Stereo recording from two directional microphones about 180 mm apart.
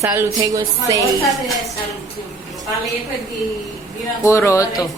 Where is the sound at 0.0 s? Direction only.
15° right (ahead or behind).